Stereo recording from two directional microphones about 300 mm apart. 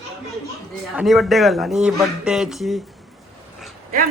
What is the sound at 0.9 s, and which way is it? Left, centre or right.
Speech, centre.